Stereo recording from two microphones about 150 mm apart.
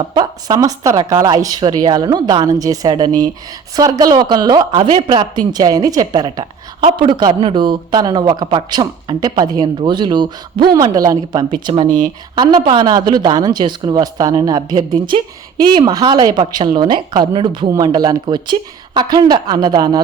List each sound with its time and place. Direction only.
0.1 s speech: 25° right (ahead or behind)